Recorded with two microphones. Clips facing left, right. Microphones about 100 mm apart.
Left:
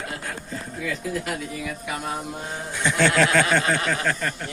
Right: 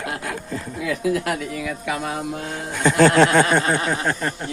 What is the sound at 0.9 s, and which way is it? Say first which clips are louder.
Speech: right 7 dB; 80° right.